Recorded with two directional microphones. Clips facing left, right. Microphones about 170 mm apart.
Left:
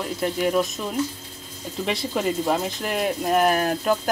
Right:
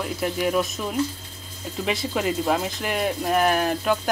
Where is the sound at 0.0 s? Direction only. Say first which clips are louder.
Left 1 dB; centre (ahead or behind).